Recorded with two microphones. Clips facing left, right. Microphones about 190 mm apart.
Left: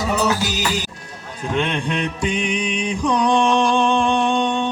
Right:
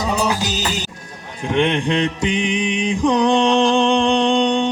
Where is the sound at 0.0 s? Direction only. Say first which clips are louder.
Even; 15° right (ahead or behind).